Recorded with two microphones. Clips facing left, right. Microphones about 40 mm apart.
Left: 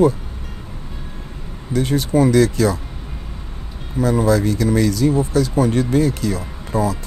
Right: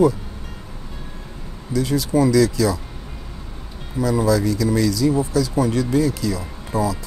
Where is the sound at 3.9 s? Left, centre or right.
Left.